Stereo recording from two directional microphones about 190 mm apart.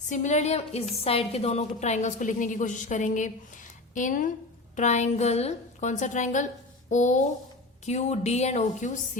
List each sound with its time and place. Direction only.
0.1 s a woman's voice: 40° left (ahead or behind)